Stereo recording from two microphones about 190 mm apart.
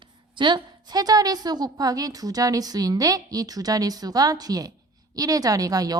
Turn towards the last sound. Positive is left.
turn(degrees=-20)  # may be behind; listen again after turning